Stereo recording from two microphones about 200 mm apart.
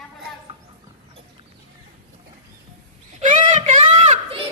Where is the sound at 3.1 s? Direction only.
40° right (ahead or behind).